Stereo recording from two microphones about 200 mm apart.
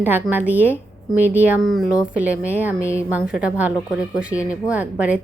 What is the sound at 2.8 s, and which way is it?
Speech, 15° left (ahead or behind).